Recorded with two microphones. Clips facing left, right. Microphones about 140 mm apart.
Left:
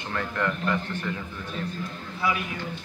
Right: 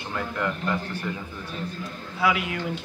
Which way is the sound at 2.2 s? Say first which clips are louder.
Right 4 dB; 90° right.